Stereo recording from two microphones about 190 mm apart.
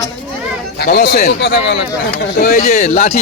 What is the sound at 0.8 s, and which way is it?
A man's voice, 60° left (ahead or behind).